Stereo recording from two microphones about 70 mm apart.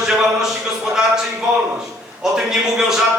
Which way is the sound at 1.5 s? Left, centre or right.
Centre.